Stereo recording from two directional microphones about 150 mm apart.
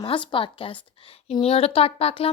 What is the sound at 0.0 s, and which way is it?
A woman's voice, 35° left (ahead or behind).